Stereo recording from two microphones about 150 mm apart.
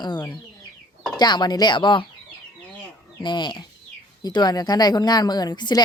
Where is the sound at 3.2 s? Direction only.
30° left (ahead or behind).